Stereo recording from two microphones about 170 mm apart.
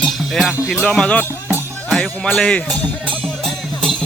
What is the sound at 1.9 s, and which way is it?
Speech, centre (ahead or behind).